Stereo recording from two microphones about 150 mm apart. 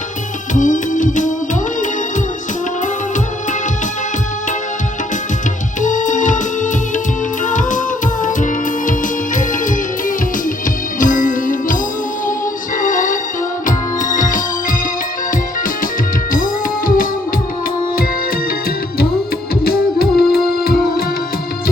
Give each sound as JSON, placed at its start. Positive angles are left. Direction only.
{"t": 0.5, "sound": "music", "side_deg": 60}
{"t": 5.8, "sound": "music", "side_deg": 60}
{"t": 8.9, "sound": "music", "side_deg": 60}
{"t": 11.0, "sound": "music", "side_deg": 60}
{"t": 12.8, "sound": "music", "side_deg": 60}
{"t": 16.3, "sound": "music", "side_deg": 65}
{"t": 19.6, "sound": "music", "side_deg": 90}